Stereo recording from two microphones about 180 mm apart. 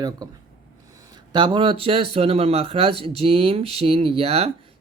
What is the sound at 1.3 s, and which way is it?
Speech, 25° right (ahead or behind).